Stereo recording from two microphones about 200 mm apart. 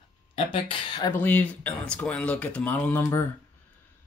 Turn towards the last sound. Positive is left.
turn(degrees=10)  # may be behind; listen again after turning